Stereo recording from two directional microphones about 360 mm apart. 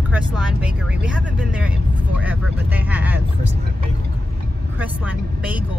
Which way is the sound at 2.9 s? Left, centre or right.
Centre.